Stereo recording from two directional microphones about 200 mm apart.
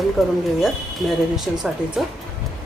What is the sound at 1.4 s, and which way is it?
Speech, centre (ahead or behind).